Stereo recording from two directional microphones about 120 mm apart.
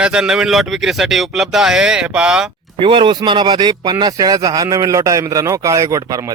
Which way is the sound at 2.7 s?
45° right (ahead or behind).